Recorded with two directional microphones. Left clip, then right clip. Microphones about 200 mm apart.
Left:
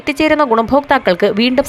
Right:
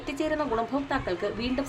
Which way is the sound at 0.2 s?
40° left (ahead or behind).